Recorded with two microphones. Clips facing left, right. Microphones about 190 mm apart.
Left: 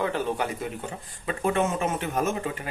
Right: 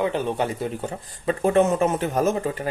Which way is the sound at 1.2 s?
35° right (ahead or behind).